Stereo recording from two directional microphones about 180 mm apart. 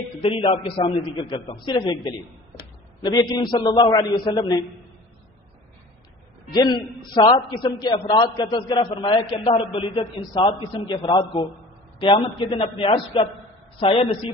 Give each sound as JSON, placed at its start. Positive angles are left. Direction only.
{"t": 0.2, "sound": "a man's voice", "side_deg": 30}
{"t": 3.0, "sound": "a man's voice", "side_deg": 25}
{"t": 6.5, "sound": "a man's voice", "side_deg": 25}